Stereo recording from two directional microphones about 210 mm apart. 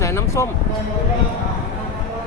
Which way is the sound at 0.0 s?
15° left (ahead or behind).